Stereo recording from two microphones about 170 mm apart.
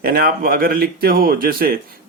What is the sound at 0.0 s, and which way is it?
Speech, 60° right (ahead or behind).